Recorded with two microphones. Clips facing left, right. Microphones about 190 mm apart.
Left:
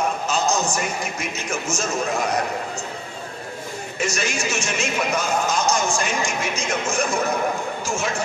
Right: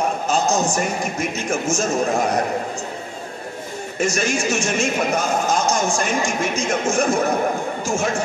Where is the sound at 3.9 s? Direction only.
45° right (ahead or behind).